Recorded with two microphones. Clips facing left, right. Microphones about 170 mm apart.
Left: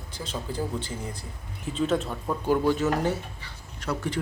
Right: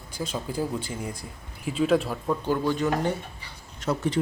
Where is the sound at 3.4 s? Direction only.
20° right (ahead or behind).